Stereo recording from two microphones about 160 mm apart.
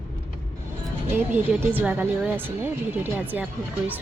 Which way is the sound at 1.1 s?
10° right (ahead or behind).